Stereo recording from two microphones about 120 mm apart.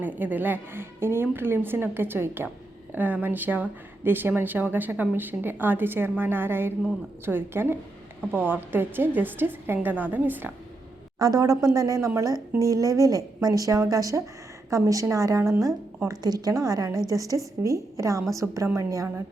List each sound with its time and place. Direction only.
0.0 s speech: 15° right (ahead or behind)
11.2 s a woman's voice: 30° right (ahead or behind)